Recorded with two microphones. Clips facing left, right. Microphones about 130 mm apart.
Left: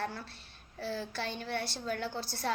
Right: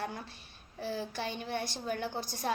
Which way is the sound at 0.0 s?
20° right (ahead or behind).